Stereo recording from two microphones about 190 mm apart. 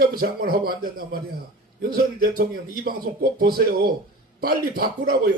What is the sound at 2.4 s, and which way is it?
Speech, 50° right (ahead or behind).